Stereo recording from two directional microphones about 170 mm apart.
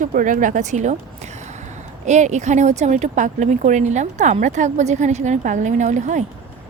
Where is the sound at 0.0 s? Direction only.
55° right (ahead or behind).